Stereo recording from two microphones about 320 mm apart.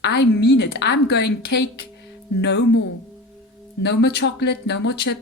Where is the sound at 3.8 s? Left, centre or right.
Left.